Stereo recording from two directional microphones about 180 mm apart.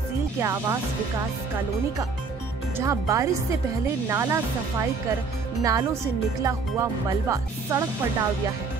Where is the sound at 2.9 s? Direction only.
20° right (ahead or behind).